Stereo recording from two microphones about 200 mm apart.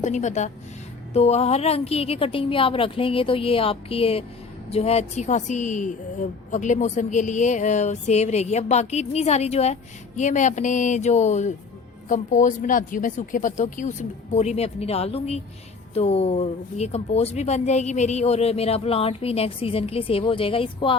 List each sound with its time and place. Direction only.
0.0 s a woman's voice: 35° left (ahead or behind)